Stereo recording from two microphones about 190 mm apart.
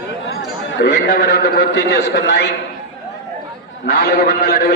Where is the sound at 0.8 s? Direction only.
60° left (ahead or behind).